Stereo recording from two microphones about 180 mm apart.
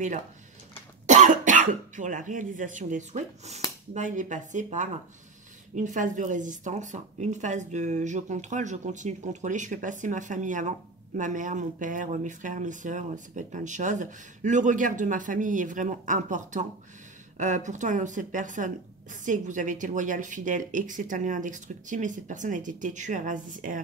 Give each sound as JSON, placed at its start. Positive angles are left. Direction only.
{"t": 1.0, "sound": "speech", "side_deg": -45}